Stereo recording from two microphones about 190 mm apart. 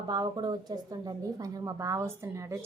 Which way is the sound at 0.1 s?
20° right (ahead or behind).